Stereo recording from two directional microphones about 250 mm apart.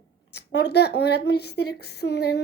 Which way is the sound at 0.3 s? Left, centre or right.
Left.